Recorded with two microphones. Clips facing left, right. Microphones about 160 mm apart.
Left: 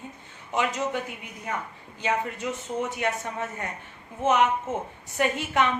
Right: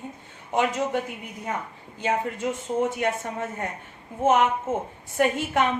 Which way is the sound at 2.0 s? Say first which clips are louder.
Right 2 dB; 50° right (ahead or behind).